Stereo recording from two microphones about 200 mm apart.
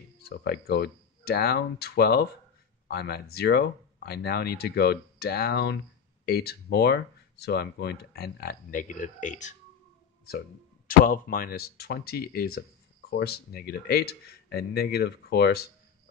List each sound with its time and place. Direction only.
0.2 s speech: 50° left (ahead or behind)
10.9 s speech: 45° left (ahead or behind)